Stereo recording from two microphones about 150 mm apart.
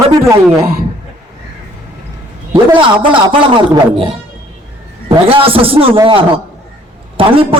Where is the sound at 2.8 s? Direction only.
35° right (ahead or behind).